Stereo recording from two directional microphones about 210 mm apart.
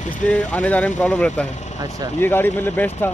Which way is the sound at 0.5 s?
5° left (ahead or behind).